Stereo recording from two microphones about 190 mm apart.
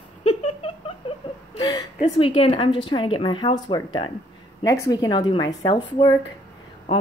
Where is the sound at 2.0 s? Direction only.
30° left (ahead or behind).